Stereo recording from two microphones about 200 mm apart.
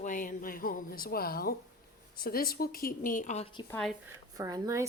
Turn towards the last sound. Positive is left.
turn(degrees=-15)  # may be behind; listen again after turning